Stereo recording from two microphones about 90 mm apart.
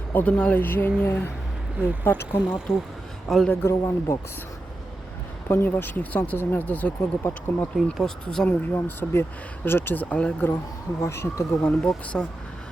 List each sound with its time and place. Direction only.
0.1 s speech: 15° left (ahead or behind)
3.2 s speech: centre (ahead or behind)
3.5 s speech: 30° left (ahead or behind)
5.5 s speech: 25° left (ahead or behind)
7.9 s speech: 5° left (ahead or behind)
8.4 s speech: 25° left (ahead or behind)
11.0 s speech: 30° left (ahead or behind)
11.8 s speech: 10° left (ahead or behind)